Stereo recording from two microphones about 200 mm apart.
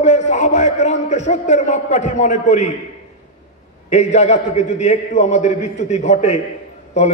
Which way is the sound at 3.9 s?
35° left (ahead or behind).